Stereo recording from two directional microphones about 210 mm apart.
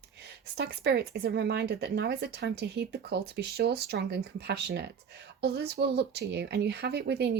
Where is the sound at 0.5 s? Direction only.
50° right (ahead or behind).